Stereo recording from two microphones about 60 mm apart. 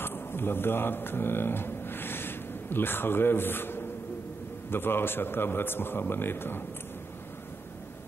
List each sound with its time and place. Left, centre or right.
0.0 s a man's voice: left